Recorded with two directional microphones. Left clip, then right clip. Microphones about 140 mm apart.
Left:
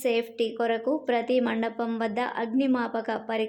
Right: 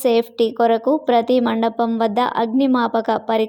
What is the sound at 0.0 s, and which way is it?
Speech, 40° right (ahead or behind).